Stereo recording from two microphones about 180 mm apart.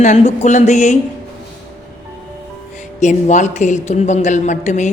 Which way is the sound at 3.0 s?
40° left (ahead or behind).